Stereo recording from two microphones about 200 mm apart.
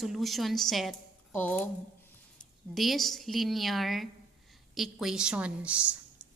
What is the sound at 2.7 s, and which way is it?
A woman's voice, centre (ahead or behind).